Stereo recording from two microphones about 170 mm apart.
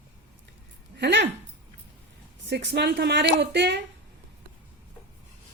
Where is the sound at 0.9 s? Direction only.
80° right.